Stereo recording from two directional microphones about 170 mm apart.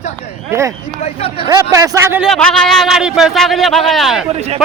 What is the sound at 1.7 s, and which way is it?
Speech, 20° right (ahead or behind).